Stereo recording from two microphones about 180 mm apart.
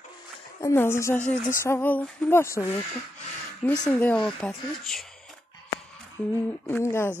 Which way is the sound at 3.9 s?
10° left (ahead or behind).